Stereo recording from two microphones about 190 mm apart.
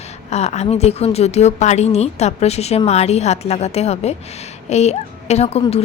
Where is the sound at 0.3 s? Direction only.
35° left (ahead or behind).